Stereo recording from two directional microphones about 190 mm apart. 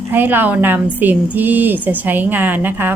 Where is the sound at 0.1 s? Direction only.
10° right (ahead or behind).